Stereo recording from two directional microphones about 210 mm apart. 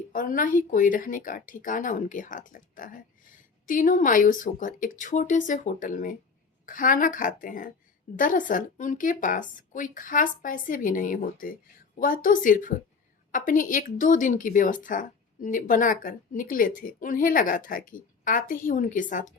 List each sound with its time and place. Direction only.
0.1 s speech: 40° left (ahead or behind)